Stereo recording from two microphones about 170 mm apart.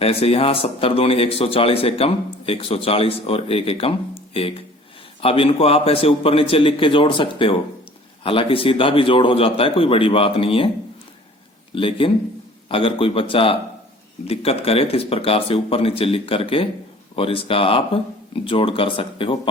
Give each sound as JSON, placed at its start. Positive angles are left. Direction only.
{"t": 0.0, "sound": "speech", "side_deg": 35}
{"t": 5.2, "sound": "speech", "side_deg": 35}
{"t": 11.7, "sound": "speech", "side_deg": 30}